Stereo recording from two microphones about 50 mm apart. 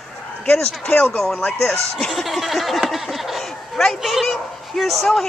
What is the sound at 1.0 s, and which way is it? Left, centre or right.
A woman's voice, centre.